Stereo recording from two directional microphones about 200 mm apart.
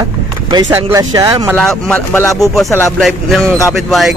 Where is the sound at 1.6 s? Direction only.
5° left (ahead or behind).